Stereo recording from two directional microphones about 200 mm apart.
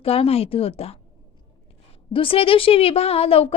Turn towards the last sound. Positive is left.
turn(degrees=30)  # may be behind; listen again after turning